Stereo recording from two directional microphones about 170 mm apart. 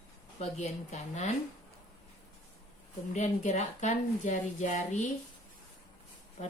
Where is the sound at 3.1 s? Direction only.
45° left (ahead or behind).